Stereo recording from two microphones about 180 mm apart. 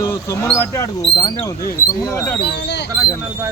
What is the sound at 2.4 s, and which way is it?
Speech, 70° left (ahead or behind).